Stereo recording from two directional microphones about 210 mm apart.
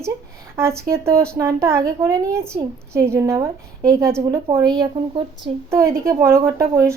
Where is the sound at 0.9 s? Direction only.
15° right (ahead or behind).